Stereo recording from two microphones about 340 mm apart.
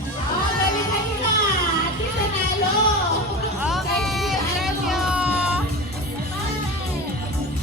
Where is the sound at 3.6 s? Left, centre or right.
Centre.